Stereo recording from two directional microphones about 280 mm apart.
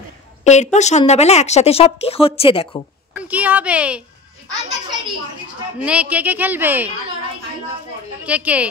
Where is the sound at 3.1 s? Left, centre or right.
Centre.